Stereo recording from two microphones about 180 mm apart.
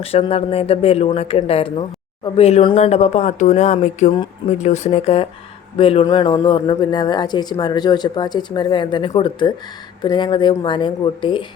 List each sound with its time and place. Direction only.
0.0 s speech: 35° left (ahead or behind)